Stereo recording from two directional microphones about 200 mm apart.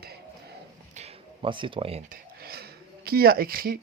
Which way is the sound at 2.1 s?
50° right (ahead or behind).